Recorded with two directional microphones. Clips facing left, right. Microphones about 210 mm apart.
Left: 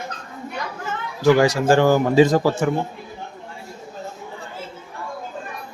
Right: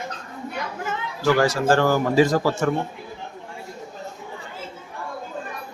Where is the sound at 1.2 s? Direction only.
15° left (ahead or behind).